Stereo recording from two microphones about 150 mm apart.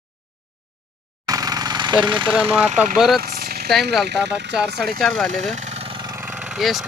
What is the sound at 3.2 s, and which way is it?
Vehicle, 90° right.